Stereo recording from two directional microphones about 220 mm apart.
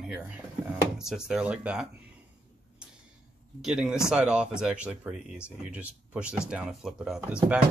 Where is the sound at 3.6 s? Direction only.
5° right (ahead or behind).